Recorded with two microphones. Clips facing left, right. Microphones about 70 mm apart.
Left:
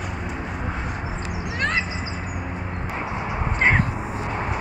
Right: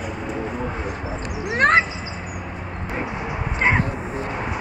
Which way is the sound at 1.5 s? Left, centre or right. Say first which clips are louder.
Right 9 dB; right.